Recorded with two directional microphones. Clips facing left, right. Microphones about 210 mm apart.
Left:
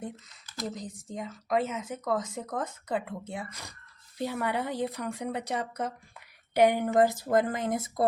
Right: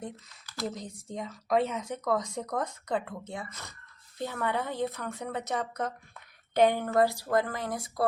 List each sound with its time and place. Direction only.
0.7 s speech: centre (ahead or behind); by 8.0 s 20° left (ahead or behind)